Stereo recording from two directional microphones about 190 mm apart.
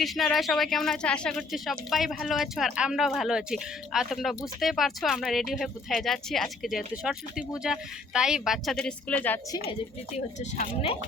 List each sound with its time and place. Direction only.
0.0 s speech: centre (ahead or behind)
10.6 s speech: 30° left (ahead or behind)